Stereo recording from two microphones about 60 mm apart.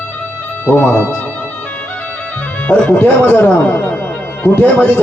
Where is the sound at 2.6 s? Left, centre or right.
Left.